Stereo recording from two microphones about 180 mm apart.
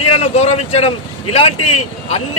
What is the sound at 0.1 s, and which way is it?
Speech, 35° left (ahead or behind).